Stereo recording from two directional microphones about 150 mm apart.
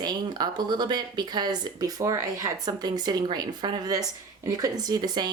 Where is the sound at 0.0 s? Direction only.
30° right (ahead or behind).